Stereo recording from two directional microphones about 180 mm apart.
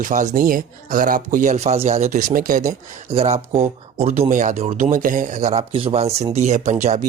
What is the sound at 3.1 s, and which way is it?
Speech, 35° right (ahead or behind).